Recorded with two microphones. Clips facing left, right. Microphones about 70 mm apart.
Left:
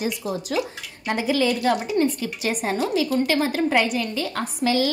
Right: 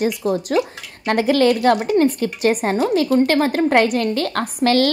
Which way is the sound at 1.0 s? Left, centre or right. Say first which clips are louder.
Right 6 dB; right.